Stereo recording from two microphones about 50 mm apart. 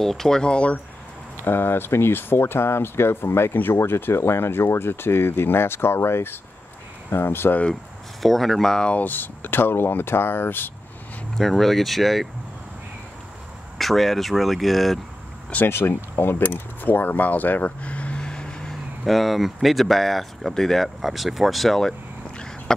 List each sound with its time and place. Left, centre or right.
0.0 s speech: centre
1.4 s speech: left
8.2 s speech: centre
9.0 s speech: left
11.3 s speech: centre
13.7 s speech: centre
15.7 s speech: left; by 18.8 s centre
19.0 s speech: centre